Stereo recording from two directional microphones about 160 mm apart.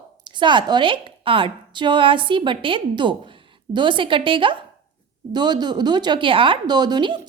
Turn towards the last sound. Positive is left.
turn(degrees=-30)  # may be behind; listen again after turning